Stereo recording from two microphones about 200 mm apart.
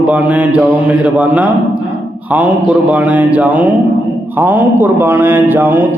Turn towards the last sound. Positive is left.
turn(degrees=-10)  # may be behind; listen again after turning